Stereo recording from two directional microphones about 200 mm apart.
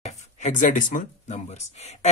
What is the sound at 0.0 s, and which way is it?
Speech, 40° left (ahead or behind).